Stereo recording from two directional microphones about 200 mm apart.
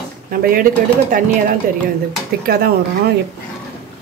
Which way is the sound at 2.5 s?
50° right (ahead or behind).